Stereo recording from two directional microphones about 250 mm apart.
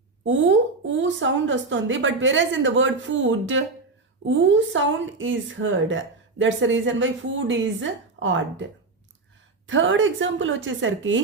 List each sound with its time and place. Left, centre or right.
0.3 s a woman's voice: right
9.6 s a woman's voice: right